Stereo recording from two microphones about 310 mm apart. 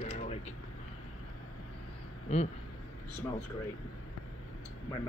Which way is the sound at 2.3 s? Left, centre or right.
Left.